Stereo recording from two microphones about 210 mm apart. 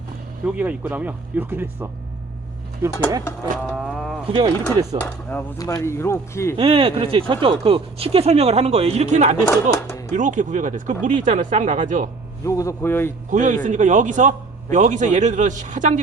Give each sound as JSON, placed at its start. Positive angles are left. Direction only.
{"t": 0.4, "sound": "speech", "side_deg": -5}
{"t": 3.6, "sound": "vehicle", "side_deg": 0}
{"t": 4.3, "sound": "speech", "side_deg": -25}
{"t": 5.0, "sound": "chopping", "side_deg": 10}
{"t": 6.6, "sound": "speech", "side_deg": -25}
{"t": 9.5, "sound": "chopping", "side_deg": 15}
{"t": 10.1, "sound": "a man's voice", "side_deg": -35}
{"t": 12.5, "sound": "chopping", "side_deg": 15}
{"t": 13.3, "sound": "a man's voice", "side_deg": -35}